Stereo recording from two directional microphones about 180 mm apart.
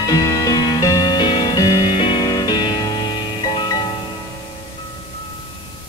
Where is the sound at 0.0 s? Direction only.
20° left (ahead or behind).